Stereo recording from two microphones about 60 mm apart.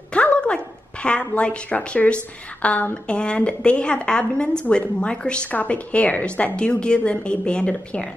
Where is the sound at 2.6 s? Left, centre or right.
Left.